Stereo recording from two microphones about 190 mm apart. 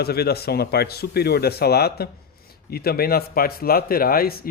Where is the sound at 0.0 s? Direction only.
55° left (ahead or behind).